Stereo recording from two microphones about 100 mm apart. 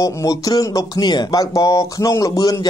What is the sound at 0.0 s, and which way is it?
Speech, 35° left (ahead or behind).